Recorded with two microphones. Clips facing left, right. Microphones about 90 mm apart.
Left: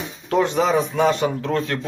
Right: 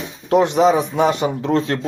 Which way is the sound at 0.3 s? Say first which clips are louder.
Right 5 dB; 20° right (ahead or behind).